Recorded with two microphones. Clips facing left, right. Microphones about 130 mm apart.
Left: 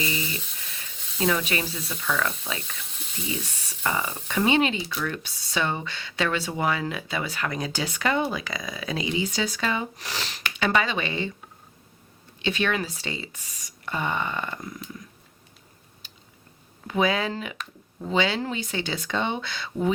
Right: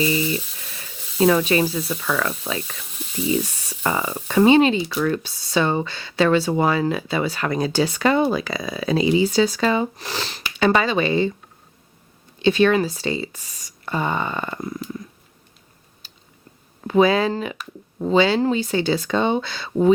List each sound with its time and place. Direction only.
0.0 s a sound: 30° right (ahead or behind)
0.9 s sizzle: centre (ahead or behind)
1.2 s speech: 35° right (ahead or behind)
2.8 s sizzle: centre (ahead or behind)
3.8 s speech: 35° right (ahead or behind)
12.4 s speech: 35° right (ahead or behind)
16.8 s speech: 35° right (ahead or behind)